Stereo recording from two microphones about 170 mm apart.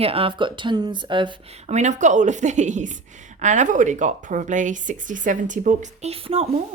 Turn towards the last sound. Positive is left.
turn(degrees=-35)  # may be behind; listen again after turning